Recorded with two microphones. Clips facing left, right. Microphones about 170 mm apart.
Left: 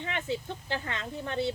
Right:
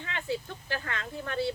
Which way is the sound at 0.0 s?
20° left (ahead or behind).